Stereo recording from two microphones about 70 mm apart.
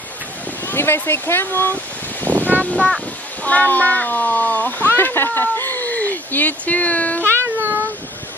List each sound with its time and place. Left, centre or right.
0.7 s speech: left
2.2 s a sound: right
3.4 s speech: left
7.3 s cat: right